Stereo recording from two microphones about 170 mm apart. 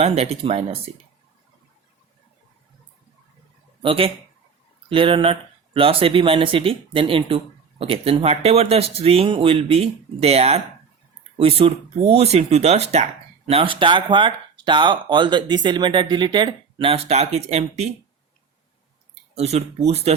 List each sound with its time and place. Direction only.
0.0 s speech: 40° right (ahead or behind)
3.8 s speech: 35° right (ahead or behind)
19.4 s speech: 40° right (ahead or behind)